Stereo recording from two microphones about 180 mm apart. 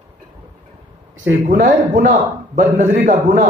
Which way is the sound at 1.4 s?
50° right (ahead or behind).